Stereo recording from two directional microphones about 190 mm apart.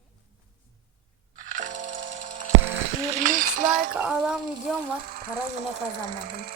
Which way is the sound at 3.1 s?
40° right (ahead or behind).